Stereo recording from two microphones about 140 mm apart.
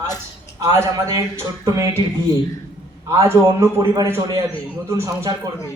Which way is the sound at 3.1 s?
20° right (ahead or behind).